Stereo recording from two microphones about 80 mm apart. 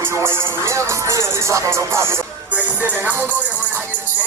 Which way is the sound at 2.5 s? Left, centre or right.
Right.